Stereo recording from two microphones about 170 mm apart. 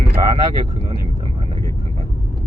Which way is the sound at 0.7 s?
35° right (ahead or behind).